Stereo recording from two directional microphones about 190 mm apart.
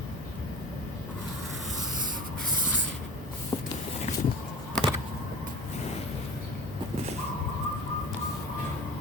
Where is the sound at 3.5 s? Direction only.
25° left (ahead or behind).